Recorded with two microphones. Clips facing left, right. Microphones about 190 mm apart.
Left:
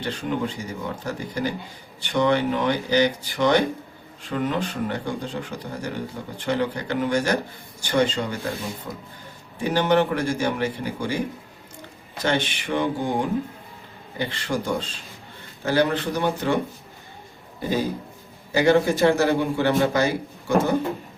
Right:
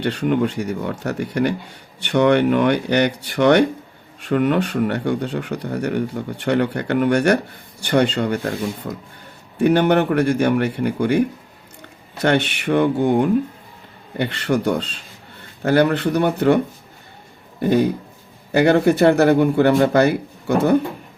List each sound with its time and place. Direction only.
0.0 s speech: 70° right (ahead or behind)
9.6 s speech: 60° right (ahead or behind)
17.6 s speech: 60° right (ahead or behind)